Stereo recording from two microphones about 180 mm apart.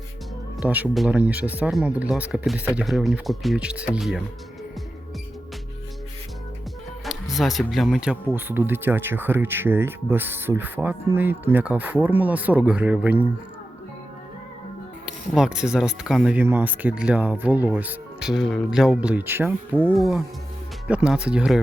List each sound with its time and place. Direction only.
0.6 s speech: 5° right (ahead or behind)
7.0 s speech: centre (ahead or behind)
15.0 s speech: 5° right (ahead or behind)
19.8 s speech: centre (ahead or behind)